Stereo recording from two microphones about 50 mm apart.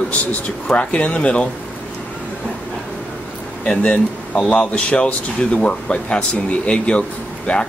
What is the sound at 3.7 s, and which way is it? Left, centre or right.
Speech, left.